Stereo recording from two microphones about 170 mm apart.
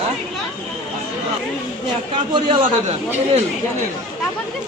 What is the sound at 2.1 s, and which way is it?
Speech, 30° right (ahead or behind).